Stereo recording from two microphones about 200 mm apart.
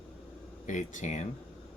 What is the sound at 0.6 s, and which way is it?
Speech, 40° left (ahead or behind).